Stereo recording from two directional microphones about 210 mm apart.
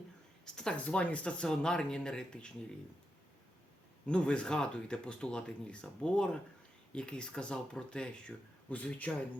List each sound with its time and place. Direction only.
0.4 s speech: 5° left (ahead or behind)
4.0 s speech: 5° left (ahead or behind)